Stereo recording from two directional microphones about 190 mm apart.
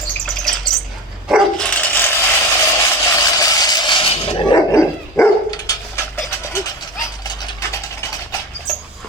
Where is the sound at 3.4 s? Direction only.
20° left (ahead or behind).